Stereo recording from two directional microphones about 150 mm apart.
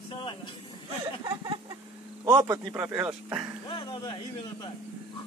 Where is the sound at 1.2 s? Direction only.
25° right (ahead or behind).